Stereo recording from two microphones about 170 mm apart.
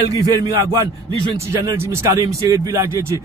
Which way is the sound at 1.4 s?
15° right (ahead or behind).